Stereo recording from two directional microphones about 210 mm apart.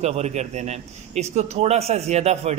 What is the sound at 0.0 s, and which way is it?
A man's voice, 30° right (ahead or behind).